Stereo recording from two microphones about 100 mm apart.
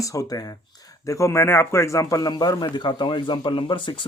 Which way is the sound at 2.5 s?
55° left (ahead or behind).